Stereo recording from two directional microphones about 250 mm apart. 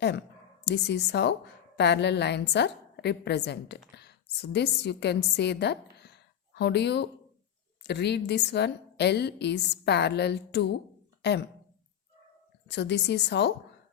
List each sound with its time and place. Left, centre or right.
0.0 s a woman's voice: left
12.6 s a woman's voice: left